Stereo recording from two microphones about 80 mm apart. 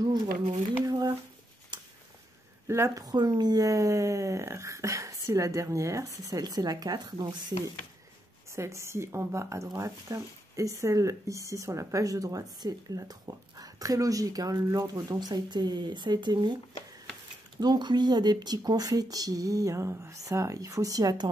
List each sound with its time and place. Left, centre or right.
0.8 s speech: right
1.7 s a sound: right
2.7 s a woman's voice: right
3.0 s speech: right
8.5 s a woman's voice: right
17.6 s speech: right